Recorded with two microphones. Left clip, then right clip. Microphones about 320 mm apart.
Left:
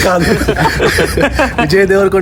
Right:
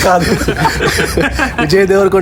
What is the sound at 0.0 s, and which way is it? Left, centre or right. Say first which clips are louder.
Speech: even; centre.